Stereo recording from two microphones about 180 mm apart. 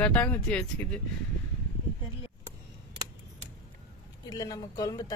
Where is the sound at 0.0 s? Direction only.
5° left (ahead or behind).